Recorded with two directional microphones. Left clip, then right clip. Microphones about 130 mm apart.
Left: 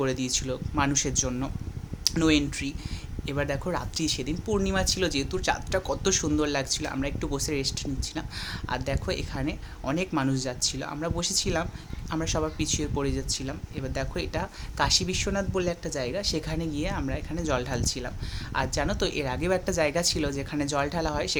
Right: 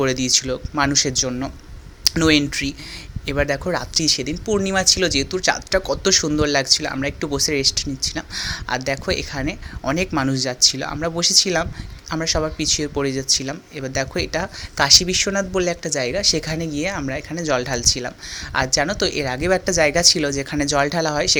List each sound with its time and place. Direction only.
0.0 s speech: 20° right (ahead or behind)